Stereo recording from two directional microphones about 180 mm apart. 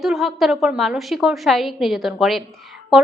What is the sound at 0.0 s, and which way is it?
A woman's voice, centre (ahead or behind).